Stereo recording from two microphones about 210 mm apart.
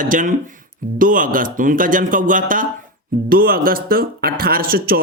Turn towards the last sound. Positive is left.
turn(degrees=-45)  # may be behind; listen again after turning